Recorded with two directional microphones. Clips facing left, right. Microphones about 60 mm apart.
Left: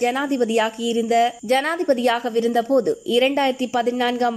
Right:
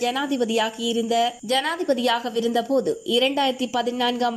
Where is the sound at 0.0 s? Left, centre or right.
Left.